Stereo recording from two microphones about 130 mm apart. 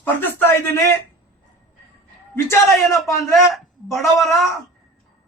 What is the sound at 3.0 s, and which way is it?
Speech, 25° left (ahead or behind).